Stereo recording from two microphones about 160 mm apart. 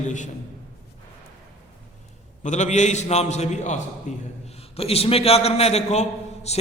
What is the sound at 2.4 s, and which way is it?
A man's voice, 45° left (ahead or behind).